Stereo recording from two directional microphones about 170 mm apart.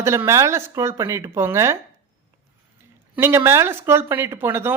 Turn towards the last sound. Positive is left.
turn(degrees=-15)  # may be behind; listen again after turning